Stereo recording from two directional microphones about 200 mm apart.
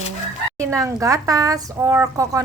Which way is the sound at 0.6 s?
15° right (ahead or behind).